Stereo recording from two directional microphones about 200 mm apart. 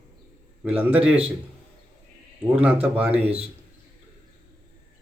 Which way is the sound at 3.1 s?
30° right (ahead or behind).